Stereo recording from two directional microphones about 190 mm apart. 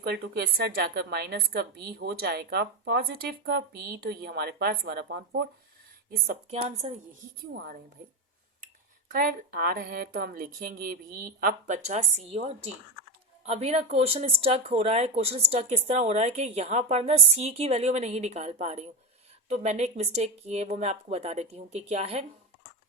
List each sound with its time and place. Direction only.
0.0 s a woman's voice: 55° right (ahead or behind)
6.5 s speech: 35° right (ahead or behind)
7.5 s a woman's voice: 55° right (ahead or behind)
9.1 s a woman's voice: 50° right (ahead or behind)